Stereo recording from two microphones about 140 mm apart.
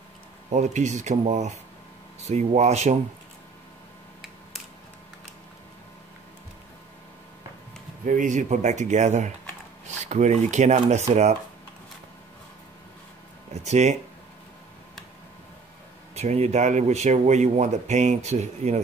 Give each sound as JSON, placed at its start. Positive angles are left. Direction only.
{"t": 0.5, "sound": "speech", "side_deg": -55}
{"t": 8.0, "sound": "speech", "side_deg": -65}
{"t": 9.8, "sound": "a sound", "side_deg": -55}
{"t": 10.5, "sound": "speech", "side_deg": -55}
{"t": 13.5, "sound": "speech", "side_deg": -50}
{"t": 16.2, "sound": "speech", "side_deg": -50}